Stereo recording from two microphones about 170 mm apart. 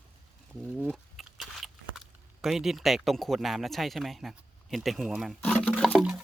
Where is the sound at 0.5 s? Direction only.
5° right (ahead or behind).